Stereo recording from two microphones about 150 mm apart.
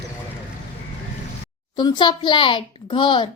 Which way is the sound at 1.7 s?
30° left (ahead or behind).